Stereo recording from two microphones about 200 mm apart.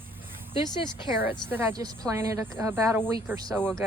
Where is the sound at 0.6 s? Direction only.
25° left (ahead or behind).